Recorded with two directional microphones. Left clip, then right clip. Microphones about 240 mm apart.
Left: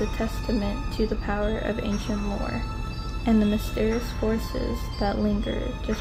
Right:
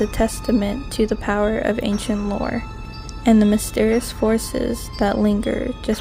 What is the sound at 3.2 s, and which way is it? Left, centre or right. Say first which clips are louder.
Speech: right 8 dB; right.